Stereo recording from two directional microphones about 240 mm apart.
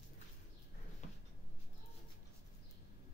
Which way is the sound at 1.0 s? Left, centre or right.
Left.